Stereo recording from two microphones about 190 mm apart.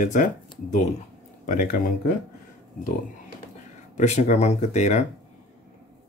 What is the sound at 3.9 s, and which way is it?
Speech, 35° left (ahead or behind).